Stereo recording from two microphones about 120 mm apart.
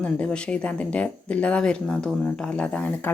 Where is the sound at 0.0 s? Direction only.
10° left (ahead or behind).